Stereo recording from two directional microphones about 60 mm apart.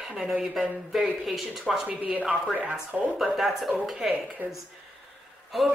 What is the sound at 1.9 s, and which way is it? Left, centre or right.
Speech, right.